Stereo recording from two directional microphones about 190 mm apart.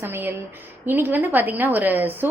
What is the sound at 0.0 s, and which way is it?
A woman's voice, 10° right (ahead or behind).